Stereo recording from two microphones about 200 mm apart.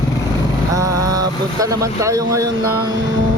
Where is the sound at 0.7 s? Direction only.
15° right (ahead or behind).